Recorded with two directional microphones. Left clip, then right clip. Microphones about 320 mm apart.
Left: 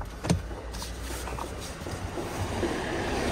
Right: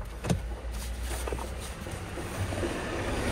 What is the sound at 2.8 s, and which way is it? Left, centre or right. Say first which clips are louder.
Vehicle: left 3 dB; left.